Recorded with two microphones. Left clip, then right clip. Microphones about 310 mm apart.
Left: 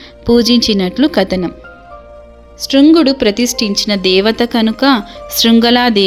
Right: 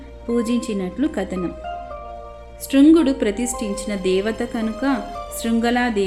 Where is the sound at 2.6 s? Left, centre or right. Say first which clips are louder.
Left 6 dB; left.